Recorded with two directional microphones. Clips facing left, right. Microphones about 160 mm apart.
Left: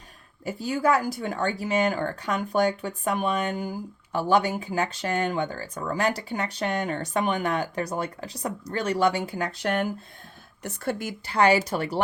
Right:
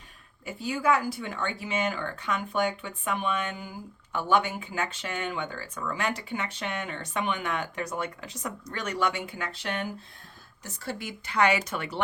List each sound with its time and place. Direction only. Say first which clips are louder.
0.4 s speech: left 3 dB; 40° left (ahead or behind)
10.6 s a woman's voice: left 7 dB; 60° left (ahead or behind)
11.3 s speech: left 4 dB; 35° left (ahead or behind)